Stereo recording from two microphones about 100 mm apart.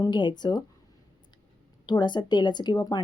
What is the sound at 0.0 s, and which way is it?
Speech, 45° left (ahead or behind).